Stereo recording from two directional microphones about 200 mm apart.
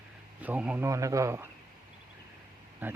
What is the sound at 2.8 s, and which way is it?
Speech, 10° right (ahead or behind).